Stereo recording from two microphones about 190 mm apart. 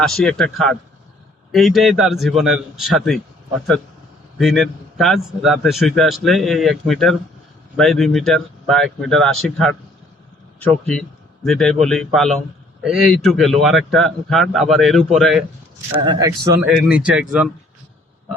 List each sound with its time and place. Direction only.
0.0 s a man's voice: centre (ahead or behind)
4.4 s a man's voice: centre (ahead or behind)
11.4 s a man's voice: centre (ahead or behind)
16.0 s speech: 20° right (ahead or behind)
16.6 s a man's voice: 5° right (ahead or behind)